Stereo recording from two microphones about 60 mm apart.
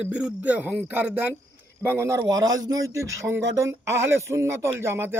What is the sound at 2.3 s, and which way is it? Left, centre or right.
Speech, right.